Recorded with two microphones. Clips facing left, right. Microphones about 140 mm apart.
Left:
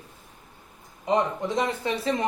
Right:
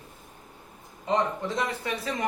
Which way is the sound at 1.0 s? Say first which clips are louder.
Left 2 dB; 20° left (ahead or behind).